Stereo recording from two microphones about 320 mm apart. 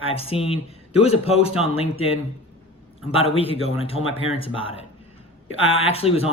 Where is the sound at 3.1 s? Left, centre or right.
Centre.